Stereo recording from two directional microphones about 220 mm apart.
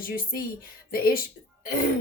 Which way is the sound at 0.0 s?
40° left (ahead or behind).